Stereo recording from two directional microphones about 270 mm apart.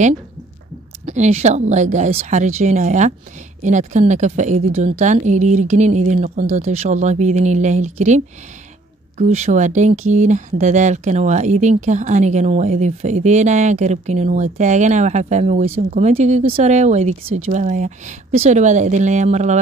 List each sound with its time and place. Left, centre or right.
1.0 s speech: right
9.2 s speech: right